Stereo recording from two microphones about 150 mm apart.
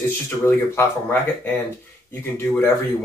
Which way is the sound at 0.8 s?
10° left (ahead or behind).